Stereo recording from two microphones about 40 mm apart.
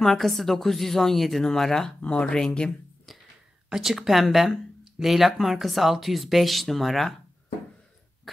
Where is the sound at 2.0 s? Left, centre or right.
Left.